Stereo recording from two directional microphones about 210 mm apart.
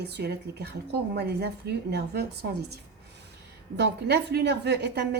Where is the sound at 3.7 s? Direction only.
55° right (ahead or behind).